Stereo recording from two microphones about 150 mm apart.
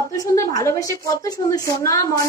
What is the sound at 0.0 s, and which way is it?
A woman's voice, 20° left (ahead or behind).